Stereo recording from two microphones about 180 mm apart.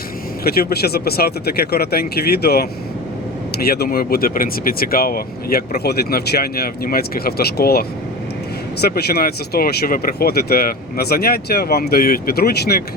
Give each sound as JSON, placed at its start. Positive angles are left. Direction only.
{"t": 0.4, "sound": "speech", "side_deg": 60}